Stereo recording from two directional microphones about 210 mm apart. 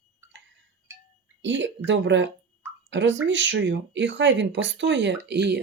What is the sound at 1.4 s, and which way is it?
Speech, 60° right (ahead or behind).